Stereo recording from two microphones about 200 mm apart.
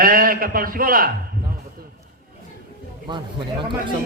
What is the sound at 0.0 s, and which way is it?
A man's voice, 45° right (ahead or behind).